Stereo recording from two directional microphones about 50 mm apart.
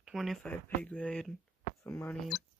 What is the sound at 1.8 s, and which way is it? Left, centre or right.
Speech, left.